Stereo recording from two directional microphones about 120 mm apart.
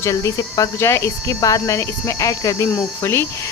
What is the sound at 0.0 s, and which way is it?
Speech, 25° left (ahead or behind).